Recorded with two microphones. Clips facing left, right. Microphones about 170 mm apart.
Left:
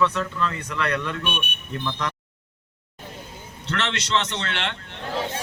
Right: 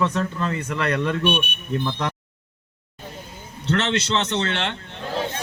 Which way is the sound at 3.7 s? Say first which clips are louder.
Right 5 dB; 35° right (ahead or behind).